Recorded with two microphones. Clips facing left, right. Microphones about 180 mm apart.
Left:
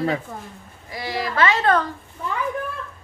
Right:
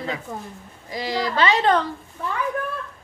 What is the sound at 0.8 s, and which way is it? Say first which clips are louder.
Speech: right 2 dB; 20° right (ahead or behind).